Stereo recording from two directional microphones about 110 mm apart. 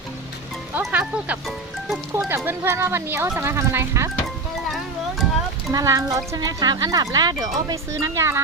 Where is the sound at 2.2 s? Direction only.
20° right (ahead or behind).